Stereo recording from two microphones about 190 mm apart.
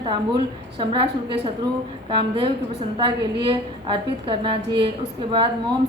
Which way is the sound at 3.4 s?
25° right (ahead or behind).